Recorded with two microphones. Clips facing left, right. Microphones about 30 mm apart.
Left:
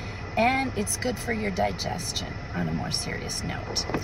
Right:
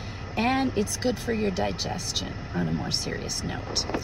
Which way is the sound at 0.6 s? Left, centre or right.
Right.